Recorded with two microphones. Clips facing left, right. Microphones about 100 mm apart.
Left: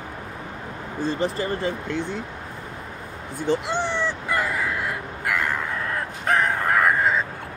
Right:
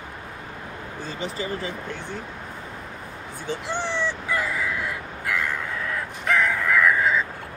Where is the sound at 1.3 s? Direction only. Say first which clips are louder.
Left 4 dB; 50° left (ahead or behind).